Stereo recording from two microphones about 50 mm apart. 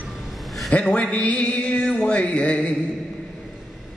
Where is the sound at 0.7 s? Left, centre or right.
Left.